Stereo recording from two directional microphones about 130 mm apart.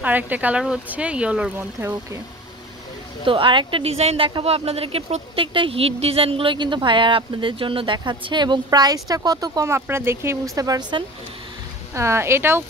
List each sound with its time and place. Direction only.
0.0 s speech: 10° right (ahead or behind)
3.3 s a woman's voice: 40° right (ahead or behind)
11.9 s speech: 20° right (ahead or behind)